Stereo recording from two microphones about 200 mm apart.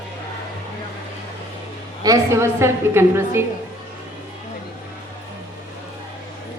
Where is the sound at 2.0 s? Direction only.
15° right (ahead or behind).